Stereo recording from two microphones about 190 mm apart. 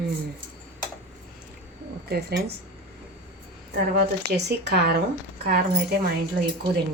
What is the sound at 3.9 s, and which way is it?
Speech, 60° right (ahead or behind).